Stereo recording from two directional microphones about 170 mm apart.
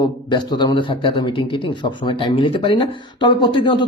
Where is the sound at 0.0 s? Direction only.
25° left (ahead or behind).